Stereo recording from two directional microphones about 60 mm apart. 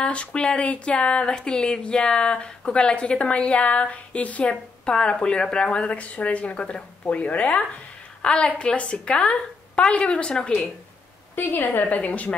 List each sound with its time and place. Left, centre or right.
0.0 s speech: centre
11.3 s speech: left